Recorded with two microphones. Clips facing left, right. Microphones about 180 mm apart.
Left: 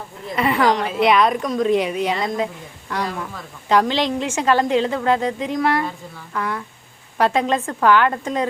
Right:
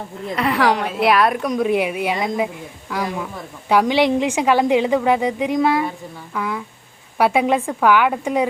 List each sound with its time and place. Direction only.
0.3 s a woman's voice: centre (ahead or behind)